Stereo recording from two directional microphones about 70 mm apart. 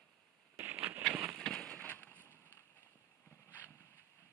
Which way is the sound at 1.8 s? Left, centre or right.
Left.